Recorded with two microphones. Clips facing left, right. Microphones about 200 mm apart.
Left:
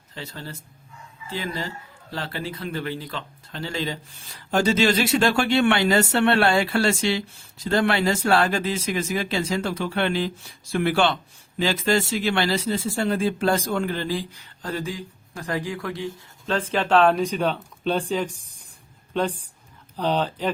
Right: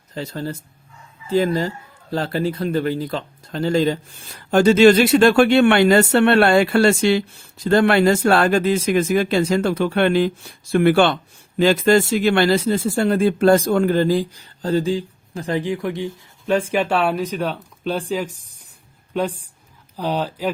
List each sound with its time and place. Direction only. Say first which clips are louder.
0.1 s speech: right 9 dB; 40° right (ahead or behind)
4.5 s speech: right 8 dB; 55° right (ahead or behind); by 18.7 s 5° right (ahead or behind)
20.0 s speech: right 1 dB; 10° right (ahead or behind)